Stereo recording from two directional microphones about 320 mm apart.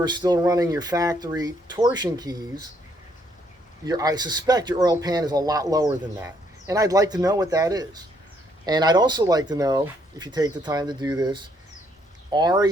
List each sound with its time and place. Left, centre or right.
0.0 s speech: centre
3.8 s speech: centre